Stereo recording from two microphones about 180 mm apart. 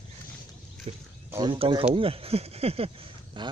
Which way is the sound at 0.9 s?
35° right (ahead or behind).